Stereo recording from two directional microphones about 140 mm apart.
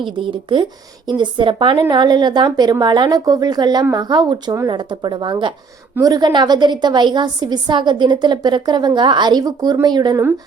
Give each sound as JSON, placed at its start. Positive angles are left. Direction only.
{"t": 0.2, "sound": "a woman's voice", "side_deg": -35}